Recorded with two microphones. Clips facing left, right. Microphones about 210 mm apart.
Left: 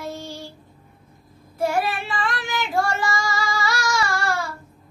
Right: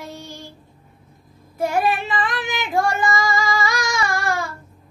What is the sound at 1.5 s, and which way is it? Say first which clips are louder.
Child singing: right 2 dB; 20° right (ahead or behind).